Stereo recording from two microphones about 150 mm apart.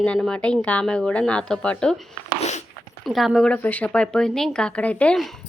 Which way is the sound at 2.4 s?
50° left (ahead or behind).